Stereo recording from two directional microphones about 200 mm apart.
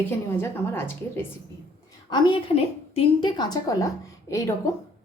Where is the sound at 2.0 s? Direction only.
25° left (ahead or behind).